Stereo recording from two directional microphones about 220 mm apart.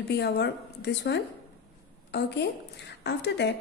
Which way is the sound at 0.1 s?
50° left (ahead or behind).